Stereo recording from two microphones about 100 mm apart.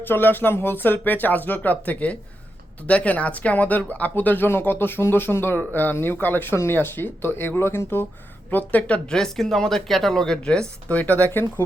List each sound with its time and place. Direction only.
0.0 s speech: 20° left (ahead or behind)